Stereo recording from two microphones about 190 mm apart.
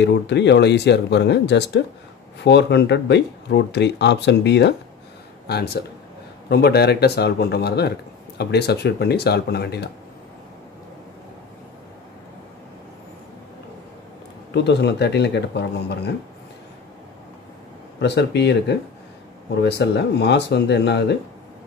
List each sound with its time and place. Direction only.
0.0 s speech: 65° left (ahead or behind)
14.5 s speech: 60° left (ahead or behind)
17.9 s speech: 65° left (ahead or behind)